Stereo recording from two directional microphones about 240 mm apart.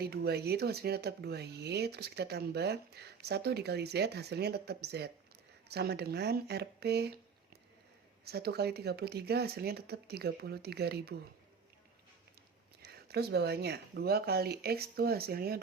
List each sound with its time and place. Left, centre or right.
0.0 s speech: right
8.2 s speech: right
12.8 s speech: right